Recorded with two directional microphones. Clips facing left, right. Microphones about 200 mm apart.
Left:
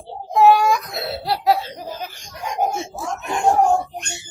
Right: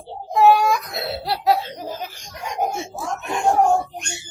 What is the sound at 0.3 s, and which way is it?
Laughter, centre (ahead or behind).